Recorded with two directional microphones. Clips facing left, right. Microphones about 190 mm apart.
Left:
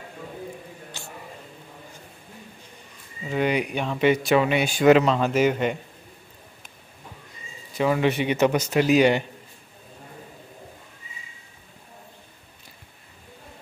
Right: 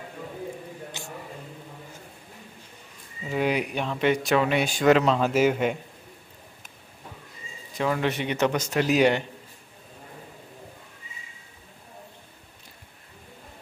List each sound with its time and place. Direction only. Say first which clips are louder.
1.0 s a sound: right 1 dB; 20° right (ahead or behind)
3.3 s speech: left 2 dB; 5° right (ahead or behind)
7.7 s speech: left 4 dB; 5° left (ahead or behind)